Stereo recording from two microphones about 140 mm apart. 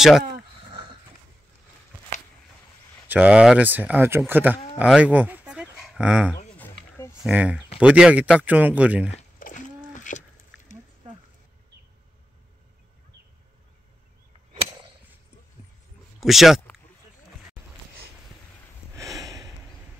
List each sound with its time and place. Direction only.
3.1 s a man's voice: 10° right (ahead or behind)
6.5 s roaring cats: 15° left (ahead or behind)
7.2 s a man's voice: 10° right (ahead or behind)
9.4 s a sound: 65° left (ahead or behind)
16.2 s speech: centre (ahead or behind)
18.9 s a sound: 25° right (ahead or behind)